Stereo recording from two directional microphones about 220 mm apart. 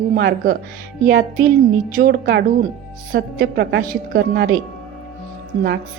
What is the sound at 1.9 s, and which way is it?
A woman's voice, 40° right (ahead or behind).